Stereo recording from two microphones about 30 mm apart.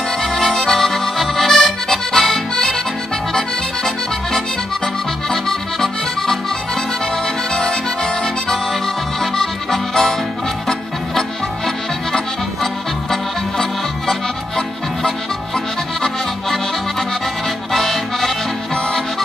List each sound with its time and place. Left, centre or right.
0.2 s accordion: centre
7.5 s accordion: left
9.2 s accordion: centre
10.7 s music: centre
15.0 s accordion: centre
17.7 s accordion: centre